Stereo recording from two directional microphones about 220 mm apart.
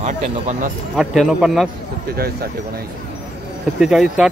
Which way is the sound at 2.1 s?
45° right (ahead or behind).